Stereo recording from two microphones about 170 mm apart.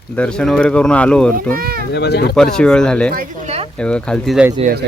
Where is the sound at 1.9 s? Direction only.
80° left.